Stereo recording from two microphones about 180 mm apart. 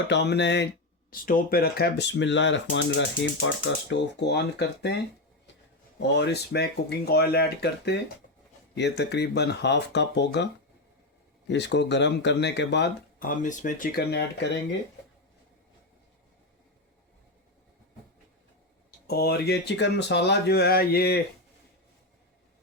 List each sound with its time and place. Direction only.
0.1 s speech: 70° left (ahead or behind)
1.1 s speech: 50° left (ahead or behind); by 4.9 s 70° left (ahead or behind)
6.0 s speech: 70° left (ahead or behind)
13.2 s speech: 45° left (ahead or behind); by 14.6 s 75° left (ahead or behind)
19.0 s speech: 60° left (ahead or behind)